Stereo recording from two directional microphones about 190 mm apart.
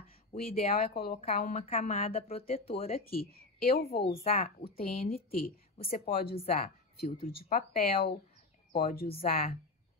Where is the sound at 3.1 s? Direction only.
50° left (ahead or behind).